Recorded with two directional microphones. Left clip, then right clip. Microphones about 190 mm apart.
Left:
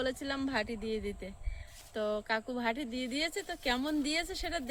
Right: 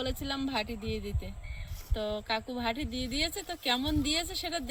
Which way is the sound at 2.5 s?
35° left (ahead or behind).